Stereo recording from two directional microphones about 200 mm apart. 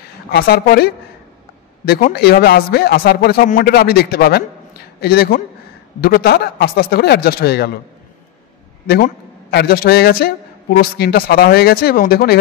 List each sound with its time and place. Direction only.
0.3 s a man's voice: 50° left (ahead or behind)
8.8 s a man's voice: 50° left (ahead or behind)